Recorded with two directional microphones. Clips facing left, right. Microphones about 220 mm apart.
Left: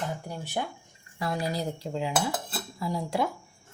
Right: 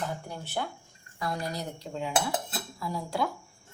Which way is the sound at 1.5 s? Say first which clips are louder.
Left 5 dB; 30° left (ahead or behind).